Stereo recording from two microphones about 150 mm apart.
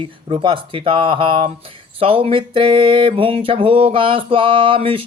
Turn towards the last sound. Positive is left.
turn(degrees=-35)  # may be behind; listen again after turning